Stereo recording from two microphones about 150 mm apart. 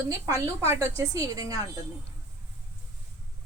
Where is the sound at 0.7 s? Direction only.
25° right (ahead or behind).